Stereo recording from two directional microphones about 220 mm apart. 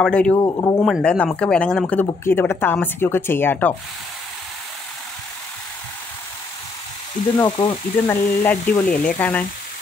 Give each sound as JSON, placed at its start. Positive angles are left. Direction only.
{"t": 0.0, "sound": "speech", "side_deg": 5}
{"t": 0.4, "sound": "speech", "side_deg": 15}
{"t": 0.8, "sound": "speech", "side_deg": 5}
{"t": 7.3, "sound": "speech", "side_deg": 15}